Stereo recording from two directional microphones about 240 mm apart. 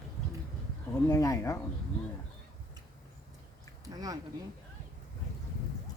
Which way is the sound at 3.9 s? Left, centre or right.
Centre.